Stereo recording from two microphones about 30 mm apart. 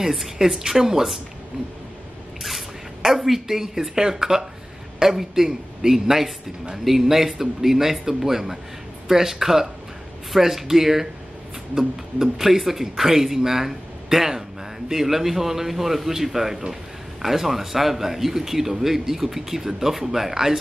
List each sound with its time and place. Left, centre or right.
0.0 s a woman's voice: centre
0.4 s speech: centre
3.3 s speech: centre